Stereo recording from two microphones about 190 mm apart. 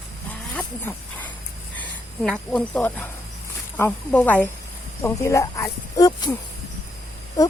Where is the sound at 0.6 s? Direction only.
10° left (ahead or behind).